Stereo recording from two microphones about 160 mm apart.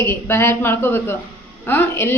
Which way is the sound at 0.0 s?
15° left (ahead or behind).